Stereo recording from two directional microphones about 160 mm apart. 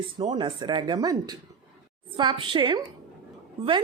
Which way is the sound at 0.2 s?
30° right (ahead or behind).